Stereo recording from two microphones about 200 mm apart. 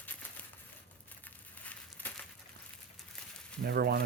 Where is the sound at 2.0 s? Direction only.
10° left (ahead or behind).